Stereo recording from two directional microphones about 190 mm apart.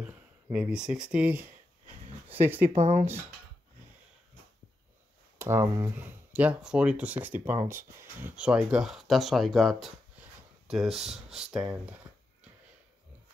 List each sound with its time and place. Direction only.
0.0 s speech: 5° right (ahead or behind)
2.7 s speech: 35° right (ahead or behind)
5.4 s speech: 15° right (ahead or behind)